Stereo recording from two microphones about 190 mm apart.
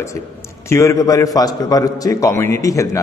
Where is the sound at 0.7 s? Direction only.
15° left (ahead or behind).